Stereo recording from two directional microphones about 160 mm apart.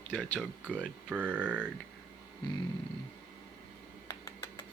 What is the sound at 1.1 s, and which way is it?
Speech, 10° right (ahead or behind).